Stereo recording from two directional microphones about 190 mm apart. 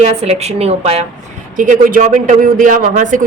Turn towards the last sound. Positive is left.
turn(degrees=-40)  # may be behind; listen again after turning